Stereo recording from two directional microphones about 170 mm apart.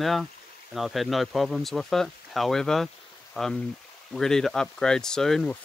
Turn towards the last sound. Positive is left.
turn(degrees=5)  # may be behind; listen again after turning